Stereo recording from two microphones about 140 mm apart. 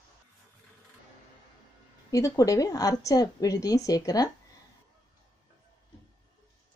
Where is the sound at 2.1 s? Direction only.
25° left (ahead or behind).